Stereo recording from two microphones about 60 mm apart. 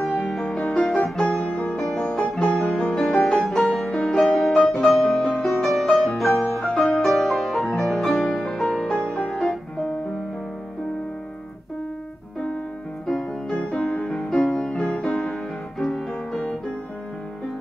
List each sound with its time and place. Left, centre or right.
0.2 s music: centre
13.0 s music: centre